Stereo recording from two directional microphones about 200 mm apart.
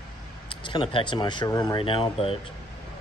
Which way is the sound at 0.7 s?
25° left (ahead or behind).